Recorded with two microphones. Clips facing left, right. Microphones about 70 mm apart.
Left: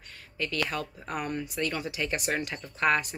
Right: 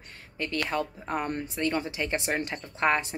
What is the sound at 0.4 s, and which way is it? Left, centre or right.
A woman's voice, right.